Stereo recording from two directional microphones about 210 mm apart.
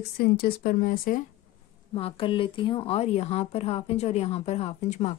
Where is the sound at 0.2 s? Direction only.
45° left (ahead or behind).